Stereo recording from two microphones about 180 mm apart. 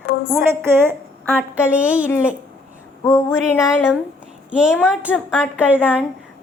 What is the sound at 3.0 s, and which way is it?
Speech, 15° left (ahead or behind).